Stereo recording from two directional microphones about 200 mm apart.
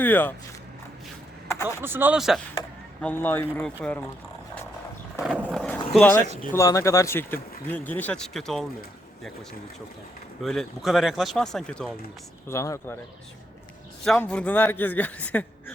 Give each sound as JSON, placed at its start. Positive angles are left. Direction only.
{"t": 0.0, "sound": "a man's voice", "side_deg": 10}
{"t": 1.6, "sound": "speech", "side_deg": -10}
{"t": 3.0, "sound": "a man's voice", "side_deg": 10}
{"t": 5.4, "sound": "a sound", "side_deg": 5}
{"t": 5.9, "sound": "speech", "side_deg": 5}
{"t": 6.1, "sound": "speech", "side_deg": -35}
{"t": 6.5, "sound": "a man's voice", "side_deg": 15}
{"t": 10.4, "sound": "speech", "side_deg": 0}
{"t": 12.5, "sound": "a man's voice", "side_deg": 15}
{"t": 14.0, "sound": "a man's voice", "side_deg": 5}